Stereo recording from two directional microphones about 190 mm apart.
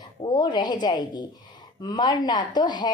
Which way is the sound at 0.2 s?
20° left (ahead or behind).